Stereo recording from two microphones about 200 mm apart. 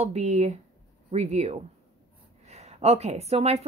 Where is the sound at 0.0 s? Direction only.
35° right (ahead or behind).